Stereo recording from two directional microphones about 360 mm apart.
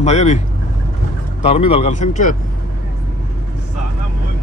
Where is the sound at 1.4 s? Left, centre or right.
Centre.